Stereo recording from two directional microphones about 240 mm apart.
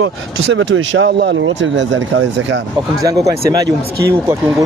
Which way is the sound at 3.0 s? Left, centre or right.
Centre.